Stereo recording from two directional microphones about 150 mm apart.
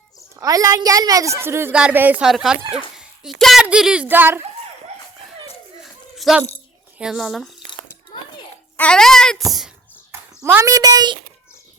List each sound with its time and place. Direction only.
0.3 s a woman's voice: 25° right (ahead or behind)
5.8 s a sound: centre (ahead or behind)
7.0 s speech: centre (ahead or behind)
8.7 s speech: 10° left (ahead or behind)
10.1 s a child's voice: 15° right (ahead or behind)